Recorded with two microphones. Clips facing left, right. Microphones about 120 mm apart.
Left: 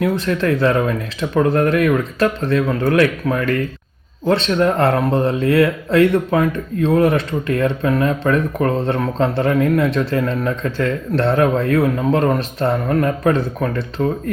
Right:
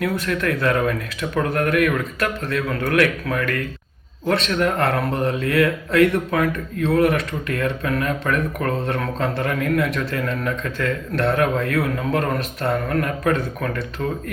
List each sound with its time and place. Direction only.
0.0 s speech: 25° left (ahead or behind)